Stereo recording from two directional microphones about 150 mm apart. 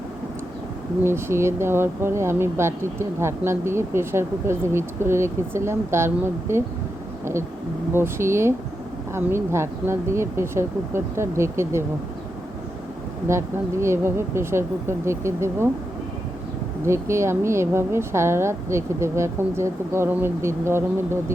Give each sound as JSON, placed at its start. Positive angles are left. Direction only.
{"t": 1.0, "sound": "speech", "side_deg": -15}
{"t": 7.9, "sound": "speech", "side_deg": -15}
{"t": 13.8, "sound": "speech", "side_deg": -15}
{"t": 16.8, "sound": "speech", "side_deg": -20}